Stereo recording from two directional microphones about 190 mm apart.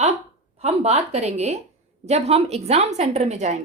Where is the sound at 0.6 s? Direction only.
35° right (ahead or behind).